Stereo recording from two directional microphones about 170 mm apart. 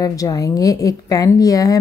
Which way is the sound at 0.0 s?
20° left (ahead or behind).